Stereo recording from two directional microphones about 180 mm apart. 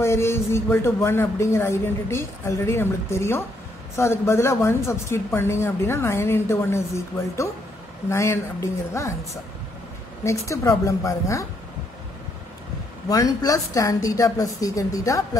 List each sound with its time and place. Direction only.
0.0 s speech: 15° left (ahead or behind)
13.1 s speech: 20° left (ahead or behind)